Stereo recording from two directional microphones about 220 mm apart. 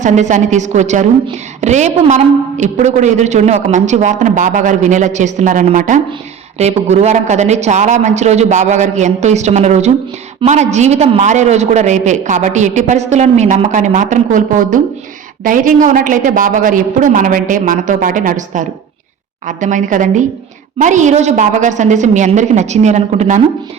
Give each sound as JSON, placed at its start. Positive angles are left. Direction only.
{"t": 0.0, "sound": "a man's voice", "side_deg": -35}